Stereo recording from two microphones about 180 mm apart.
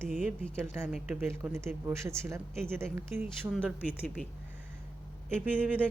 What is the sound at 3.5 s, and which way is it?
Speech, centre (ahead or behind).